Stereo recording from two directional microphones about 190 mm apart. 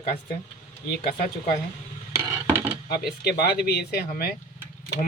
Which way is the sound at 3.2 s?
55° left (ahead or behind).